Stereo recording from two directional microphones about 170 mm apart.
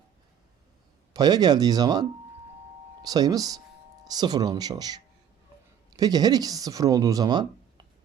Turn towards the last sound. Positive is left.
turn(degrees=-25)  # may be behind; listen again after turning